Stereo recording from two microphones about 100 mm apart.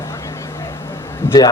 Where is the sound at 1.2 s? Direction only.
25° left (ahead or behind).